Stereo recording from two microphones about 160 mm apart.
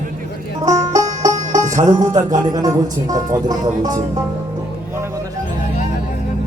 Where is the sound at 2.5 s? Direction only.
25° right (ahead or behind).